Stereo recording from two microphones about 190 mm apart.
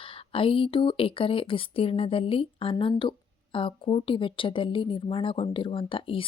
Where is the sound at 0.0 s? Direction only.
30° left (ahead or behind).